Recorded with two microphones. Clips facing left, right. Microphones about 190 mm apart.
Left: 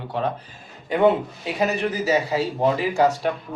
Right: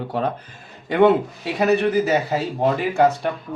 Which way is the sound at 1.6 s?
65° right (ahead or behind).